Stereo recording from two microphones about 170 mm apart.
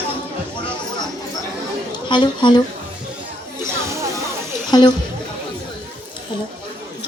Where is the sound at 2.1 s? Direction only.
30° left (ahead or behind).